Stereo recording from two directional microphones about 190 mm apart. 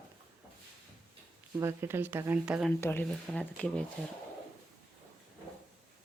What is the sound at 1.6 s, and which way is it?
Speech, 15° right (ahead or behind).